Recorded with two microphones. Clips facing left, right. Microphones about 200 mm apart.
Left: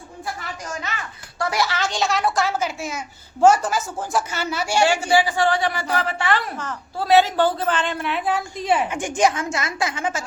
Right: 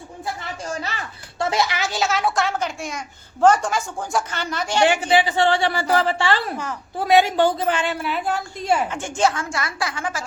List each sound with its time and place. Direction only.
0.7 s a woman's voice: 35° right (ahead or behind); by 4.9 s 10° left (ahead or behind)
4.9 s a woman's voice: 20° right (ahead or behind)
6.6 s a woman's voice: 10° right (ahead or behind)
8.9 s a woman's voice: 15° left (ahead or behind)